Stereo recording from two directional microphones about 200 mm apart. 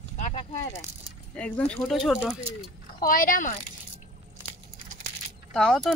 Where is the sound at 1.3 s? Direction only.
5° left (ahead or behind).